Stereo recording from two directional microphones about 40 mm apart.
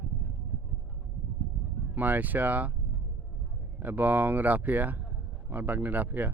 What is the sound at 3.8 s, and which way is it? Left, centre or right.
Speech, right.